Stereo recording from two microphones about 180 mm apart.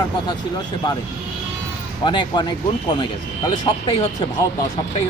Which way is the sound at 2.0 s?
25° left (ahead or behind).